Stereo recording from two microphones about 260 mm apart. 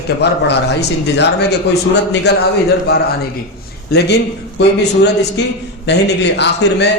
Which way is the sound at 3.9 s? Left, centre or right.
Left.